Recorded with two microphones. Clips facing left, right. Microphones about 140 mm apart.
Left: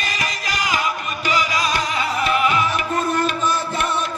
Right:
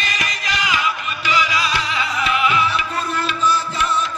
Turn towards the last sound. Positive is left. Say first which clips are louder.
# right 1 dB
turn(degrees=55)  # may be behind; listen again after turning